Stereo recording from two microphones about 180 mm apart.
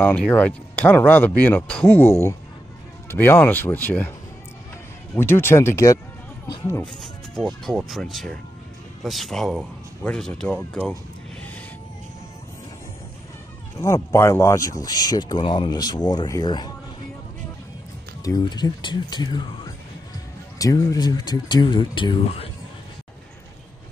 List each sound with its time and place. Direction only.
0.0 s speech: 10° left (ahead or behind)
5.1 s speech: 15° left (ahead or behind)
6.7 s speech: 5° left (ahead or behind)
13.7 s speech: 15° left (ahead or behind)
18.2 s speech: 20° left (ahead or behind)